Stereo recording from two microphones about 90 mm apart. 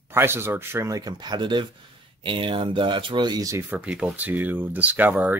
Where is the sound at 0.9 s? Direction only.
45° right (ahead or behind); by 3.4 s 60° right (ahead or behind).